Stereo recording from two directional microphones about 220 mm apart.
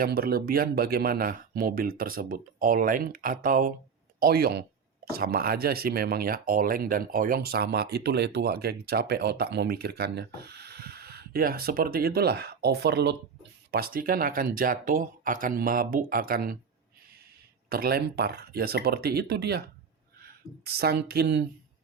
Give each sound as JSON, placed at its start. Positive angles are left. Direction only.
{"t": 0.0, "sound": "speech", "side_deg": -45}
{"t": 17.7, "sound": "speech", "side_deg": -45}